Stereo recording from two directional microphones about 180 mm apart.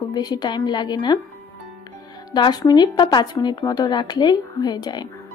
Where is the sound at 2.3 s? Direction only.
25° left (ahead or behind).